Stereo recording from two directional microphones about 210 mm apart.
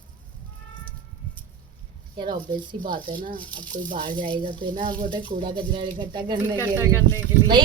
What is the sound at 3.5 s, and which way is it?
Speech, 20° right (ahead or behind).